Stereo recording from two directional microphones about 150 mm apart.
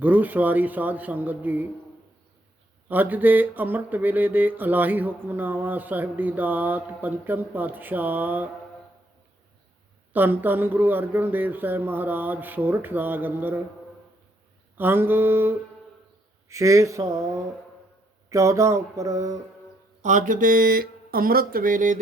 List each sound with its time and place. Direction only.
0.0 s speech: 10° right (ahead or behind)
2.9 s speech: 10° right (ahead or behind)
10.1 s speech: 10° right (ahead or behind)
14.8 s speech: 15° right (ahead or behind)
16.5 s mantra: 20° right (ahead or behind)
18.3 s mantra: 20° right (ahead or behind)
20.0 s speech: 55° right (ahead or behind)